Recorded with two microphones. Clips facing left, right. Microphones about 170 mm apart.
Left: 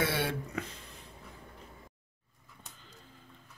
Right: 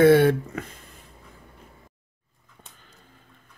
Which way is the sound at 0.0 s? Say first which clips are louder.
Right 16 dB; 60° right (ahead or behind).